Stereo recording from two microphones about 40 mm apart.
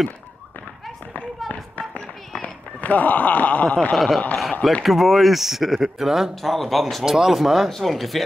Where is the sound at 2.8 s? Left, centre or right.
Left.